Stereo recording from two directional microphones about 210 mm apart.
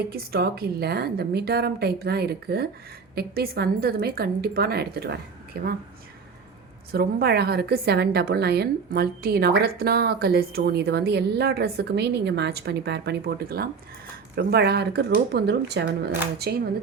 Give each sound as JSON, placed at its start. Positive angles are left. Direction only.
{"t": 0.1, "sound": "a woman's voice", "side_deg": -45}
{"t": 6.9, "sound": "a woman's voice", "side_deg": -50}